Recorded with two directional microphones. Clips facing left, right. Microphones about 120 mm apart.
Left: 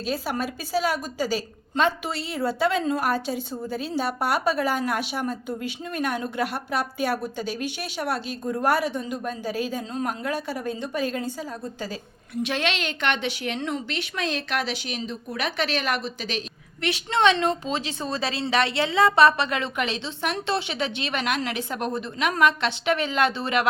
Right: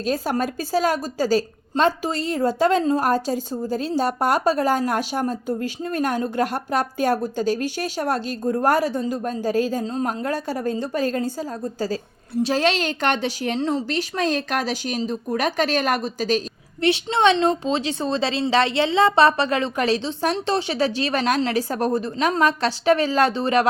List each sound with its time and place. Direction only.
0.0 s a woman's voice: 45° right (ahead or behind)
16.8 s a woman's voice: 25° right (ahead or behind)